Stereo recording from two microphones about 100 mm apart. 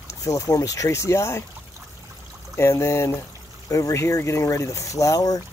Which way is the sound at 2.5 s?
30° left (ahead or behind).